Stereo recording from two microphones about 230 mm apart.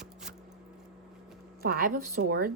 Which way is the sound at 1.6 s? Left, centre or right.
Right.